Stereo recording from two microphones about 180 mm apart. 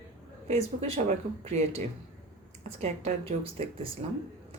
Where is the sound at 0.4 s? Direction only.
40° right (ahead or behind).